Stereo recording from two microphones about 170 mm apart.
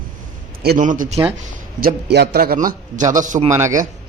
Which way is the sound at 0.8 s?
50° right (ahead or behind).